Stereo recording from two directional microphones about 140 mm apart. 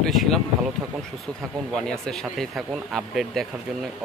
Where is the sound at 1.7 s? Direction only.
5° left (ahead or behind).